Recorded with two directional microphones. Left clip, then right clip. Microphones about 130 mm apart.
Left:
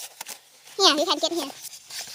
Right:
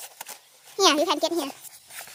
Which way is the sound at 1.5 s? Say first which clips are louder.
Left 4 dB; 10° left (ahead or behind).